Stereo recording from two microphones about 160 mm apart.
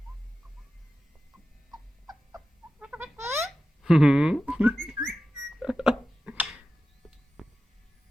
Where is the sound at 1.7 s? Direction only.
25° right (ahead or behind).